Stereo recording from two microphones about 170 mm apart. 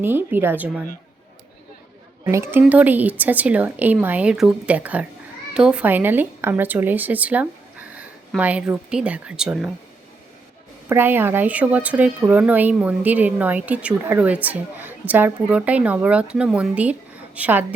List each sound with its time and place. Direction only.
0.0 s a woman's voice: 10° right (ahead or behind)
2.2 s a woman's voice: 15° right (ahead or behind)
10.8 s a woman's voice: 10° right (ahead or behind)